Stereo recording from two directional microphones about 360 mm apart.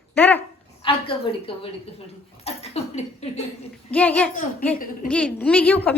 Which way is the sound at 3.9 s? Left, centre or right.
Centre.